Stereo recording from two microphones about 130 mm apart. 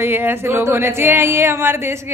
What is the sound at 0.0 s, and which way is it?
A woman's voice, 15° right (ahead or behind).